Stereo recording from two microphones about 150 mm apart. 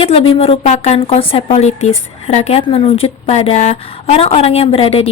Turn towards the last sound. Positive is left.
turn(degrees=40)  # may be behind; listen again after turning